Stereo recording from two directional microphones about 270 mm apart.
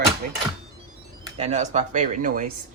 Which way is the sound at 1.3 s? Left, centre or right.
Right.